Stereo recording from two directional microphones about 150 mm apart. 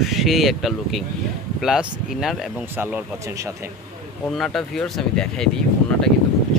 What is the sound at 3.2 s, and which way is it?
Speech, 20° right (ahead or behind).